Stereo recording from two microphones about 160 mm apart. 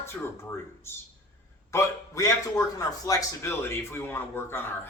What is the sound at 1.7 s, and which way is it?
A man's voice, 20° left (ahead or behind).